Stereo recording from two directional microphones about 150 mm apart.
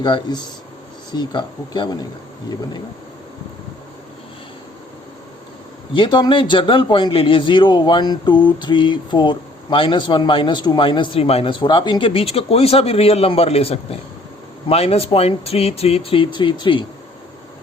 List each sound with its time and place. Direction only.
0.0 s speech: 30° left (ahead or behind)
5.9 s a man's voice: 30° left (ahead or behind)